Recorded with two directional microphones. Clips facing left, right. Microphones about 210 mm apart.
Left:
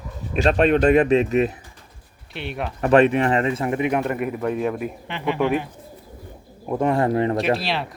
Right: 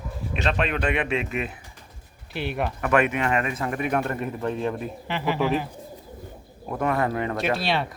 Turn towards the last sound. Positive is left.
turn(degrees=0)  # may be behind; listen again after turning